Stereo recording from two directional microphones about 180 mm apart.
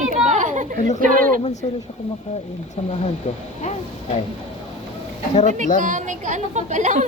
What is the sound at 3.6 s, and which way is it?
Speech, 40° left (ahead or behind).